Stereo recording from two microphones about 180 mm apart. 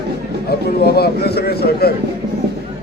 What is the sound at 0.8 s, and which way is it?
A man's voice, 60° left (ahead or behind).